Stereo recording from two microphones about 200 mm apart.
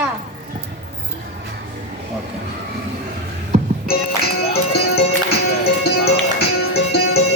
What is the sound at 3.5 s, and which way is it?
Music, 30° right (ahead or behind).